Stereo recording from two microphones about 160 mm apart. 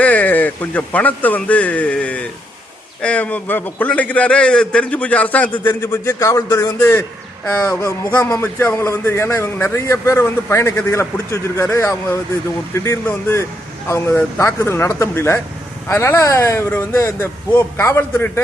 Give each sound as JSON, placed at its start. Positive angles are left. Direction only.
{"t": 0.0, "sound": "a man's voice", "side_deg": 10}